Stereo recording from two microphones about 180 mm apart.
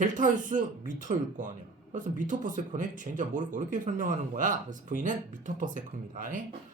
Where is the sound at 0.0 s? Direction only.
45° right (ahead or behind).